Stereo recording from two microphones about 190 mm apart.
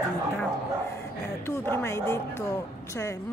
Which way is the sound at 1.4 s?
10° left (ahead or behind).